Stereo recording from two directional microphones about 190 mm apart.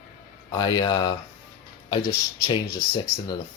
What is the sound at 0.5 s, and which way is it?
Speech, 20° left (ahead or behind).